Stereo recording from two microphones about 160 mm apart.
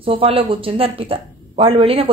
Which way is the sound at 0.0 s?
35° right (ahead or behind).